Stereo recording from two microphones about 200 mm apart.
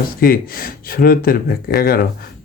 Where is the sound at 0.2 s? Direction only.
45° left (ahead or behind).